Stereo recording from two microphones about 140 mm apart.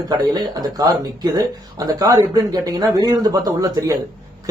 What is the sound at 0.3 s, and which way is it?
Speech, 30° right (ahead or behind).